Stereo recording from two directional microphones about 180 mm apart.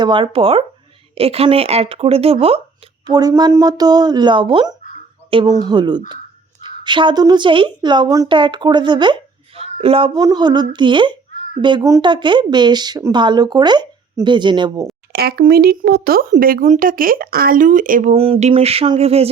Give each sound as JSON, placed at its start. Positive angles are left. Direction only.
{"t": 0.0, "sound": "speech", "side_deg": -25}
{"t": 3.1, "sound": "speech", "side_deg": -20}
{"t": 15.1, "sound": "speech", "side_deg": -60}
{"t": 18.1, "sound": "speech", "side_deg": -35}